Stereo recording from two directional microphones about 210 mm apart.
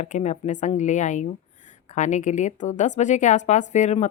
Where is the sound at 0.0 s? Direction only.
35° left (ahead or behind).